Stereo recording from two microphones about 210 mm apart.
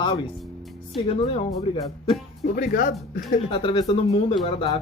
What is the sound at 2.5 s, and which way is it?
Speech, 40° left (ahead or behind).